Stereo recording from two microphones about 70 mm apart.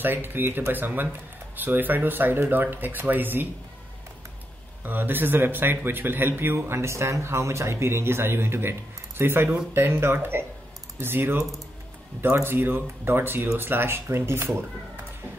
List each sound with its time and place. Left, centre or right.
0.0 s speech: right
4.8 s speech: right